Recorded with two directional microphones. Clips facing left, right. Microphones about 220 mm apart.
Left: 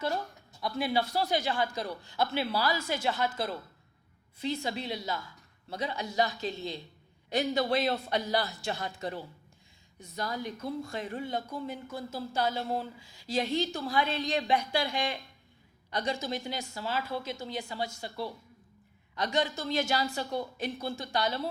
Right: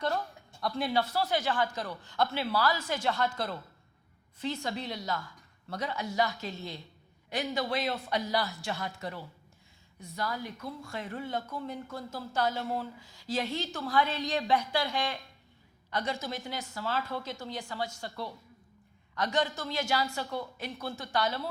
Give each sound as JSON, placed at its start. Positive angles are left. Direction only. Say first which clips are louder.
{"t": 0.6, "sound": "speech", "louder": "even", "side_deg": 0}
{"t": 1.1, "sound": "speech", "louder": "even", "side_deg": 15}
{"t": 6.0, "sound": "a woman's voice", "louder": "left 1 dB", "side_deg": 30}